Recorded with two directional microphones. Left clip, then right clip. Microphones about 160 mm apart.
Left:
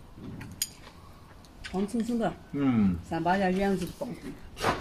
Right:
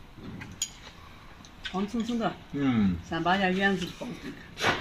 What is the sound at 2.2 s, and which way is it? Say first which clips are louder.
Speech: even; 10° left (ahead or behind).